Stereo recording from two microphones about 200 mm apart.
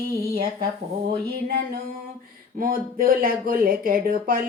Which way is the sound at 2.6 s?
45° right (ahead or behind).